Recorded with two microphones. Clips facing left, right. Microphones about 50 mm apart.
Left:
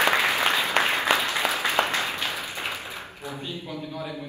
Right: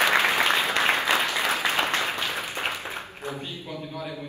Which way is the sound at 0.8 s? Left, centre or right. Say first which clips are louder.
Left 1 dB; left.